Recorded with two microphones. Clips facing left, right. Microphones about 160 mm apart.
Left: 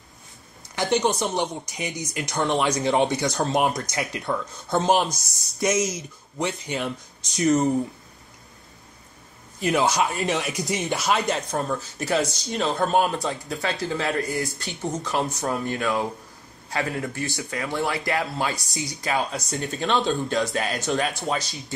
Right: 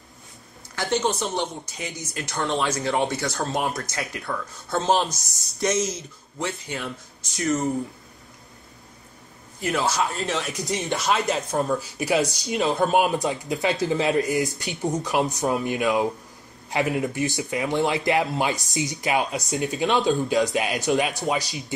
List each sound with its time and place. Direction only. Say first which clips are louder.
0.7 s speech: left 2 dB; 15° left (ahead or behind)
9.6 s speech: left 2 dB; 20° left (ahead or behind)
10.6 s speech: even; centre (ahead or behind)
11.7 s speech: right 1 dB; 15° right (ahead or behind)
12.4 s speech: right 2 dB; centre (ahead or behind)
12.9 s speech: right 1 dB; 15° right (ahead or behind)
19.8 s speech: right 2 dB; centre (ahead or behind)
20.2 s speech: right 3 dB; 15° right (ahead or behind)